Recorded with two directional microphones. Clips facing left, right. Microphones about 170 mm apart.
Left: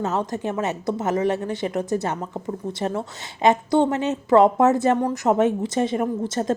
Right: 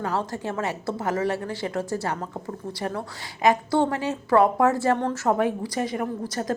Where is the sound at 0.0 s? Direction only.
20° left (ahead or behind).